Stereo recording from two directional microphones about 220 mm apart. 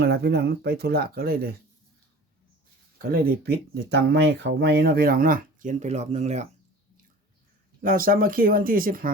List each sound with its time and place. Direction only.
0.0 s speech: 50° right (ahead or behind)
3.0 s speech: 45° right (ahead or behind)
7.8 s speech: 40° right (ahead or behind)